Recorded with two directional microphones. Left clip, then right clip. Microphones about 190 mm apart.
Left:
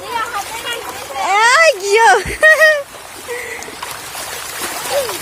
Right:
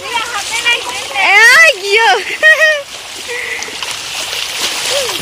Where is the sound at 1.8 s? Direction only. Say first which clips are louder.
Even; 10° left (ahead or behind).